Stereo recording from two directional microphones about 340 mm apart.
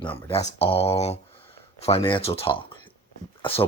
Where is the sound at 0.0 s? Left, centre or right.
Centre.